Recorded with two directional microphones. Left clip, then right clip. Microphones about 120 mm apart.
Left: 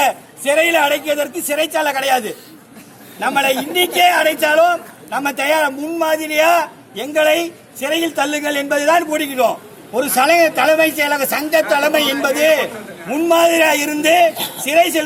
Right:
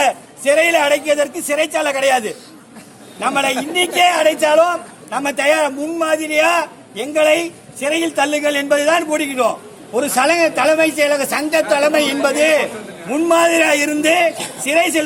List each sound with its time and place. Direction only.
0.0 s a man's voice: 15° right (ahead or behind)